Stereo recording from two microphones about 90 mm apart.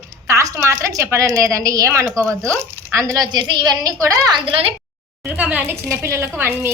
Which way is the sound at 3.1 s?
50° right (ahead or behind).